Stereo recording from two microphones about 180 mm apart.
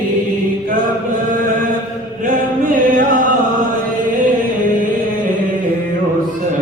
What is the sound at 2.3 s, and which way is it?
Chant, 50° right (ahead or behind).